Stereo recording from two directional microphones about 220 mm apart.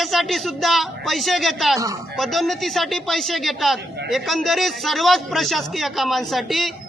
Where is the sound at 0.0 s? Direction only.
Centre (ahead or behind).